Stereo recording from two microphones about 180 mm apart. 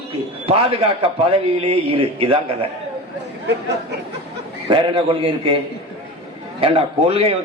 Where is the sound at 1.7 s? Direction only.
30° right (ahead or behind).